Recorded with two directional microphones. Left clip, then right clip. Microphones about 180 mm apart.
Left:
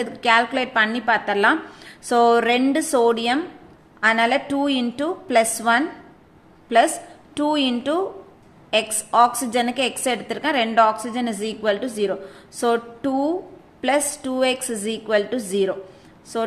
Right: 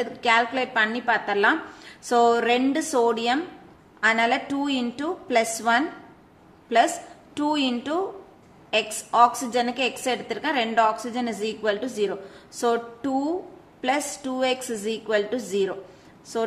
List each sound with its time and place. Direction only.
0.0 s a woman's voice: 20° left (ahead or behind)